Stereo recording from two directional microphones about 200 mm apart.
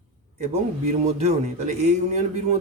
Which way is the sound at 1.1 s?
35° right (ahead or behind).